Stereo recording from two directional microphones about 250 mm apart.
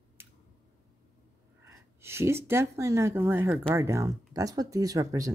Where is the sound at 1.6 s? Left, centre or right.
Centre.